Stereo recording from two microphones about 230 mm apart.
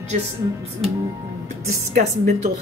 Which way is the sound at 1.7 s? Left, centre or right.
Right.